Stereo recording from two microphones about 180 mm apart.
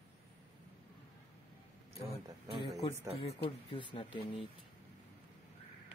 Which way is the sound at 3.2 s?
30° left (ahead or behind).